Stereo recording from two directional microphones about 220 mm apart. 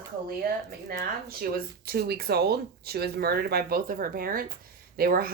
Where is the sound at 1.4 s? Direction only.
40° right (ahead or behind).